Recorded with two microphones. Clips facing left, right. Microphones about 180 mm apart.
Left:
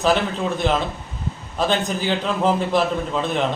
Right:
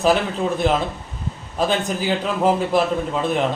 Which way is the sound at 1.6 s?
10° right (ahead or behind).